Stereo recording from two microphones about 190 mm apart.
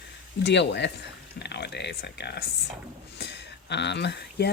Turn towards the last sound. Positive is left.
turn(degrees=65)  # may be behind; listen again after turning